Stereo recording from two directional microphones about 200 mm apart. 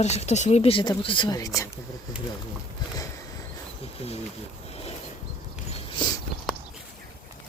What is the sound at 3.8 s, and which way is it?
Speech, 30° left (ahead or behind).